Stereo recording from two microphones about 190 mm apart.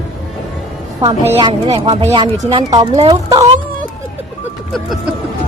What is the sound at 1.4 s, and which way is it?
Speech, 25° right (ahead or behind).